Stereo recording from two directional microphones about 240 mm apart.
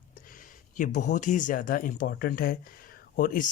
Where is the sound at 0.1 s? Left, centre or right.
Left.